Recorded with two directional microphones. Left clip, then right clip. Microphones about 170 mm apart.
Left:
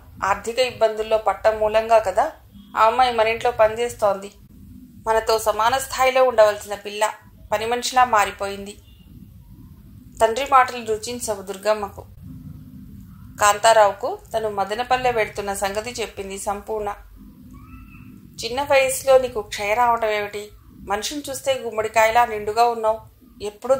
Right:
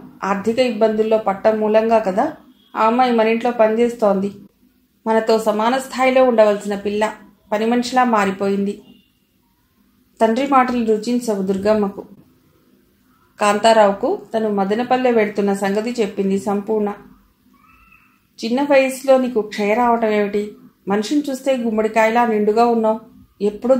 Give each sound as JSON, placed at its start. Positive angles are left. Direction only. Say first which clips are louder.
{"t": 0.2, "sound": "a woman's voice", "louder": "right 3 dB", "side_deg": 35}
{"t": 10.1, "sound": "a woman's voice", "louder": "right 1 dB", "side_deg": 35}
{"t": 13.4, "sound": "a woman's voice", "louder": "right 2 dB", "side_deg": 35}
{"t": 18.4, "sound": "a woman's voice", "louder": "right 3 dB", "side_deg": 35}